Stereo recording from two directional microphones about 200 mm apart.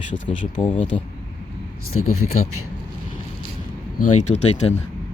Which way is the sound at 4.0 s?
35° left (ahead or behind).